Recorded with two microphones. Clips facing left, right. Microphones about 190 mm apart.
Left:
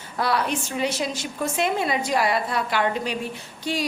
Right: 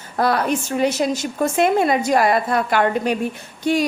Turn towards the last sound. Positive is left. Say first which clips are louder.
# right 8 dB
turn(degrees=-50)  # may be behind; listen again after turning